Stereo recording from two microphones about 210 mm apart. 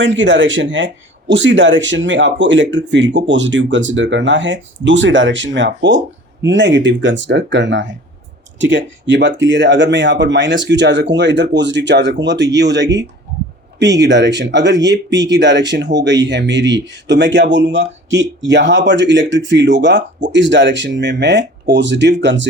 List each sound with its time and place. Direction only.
0.0 s speech: 60° right (ahead or behind)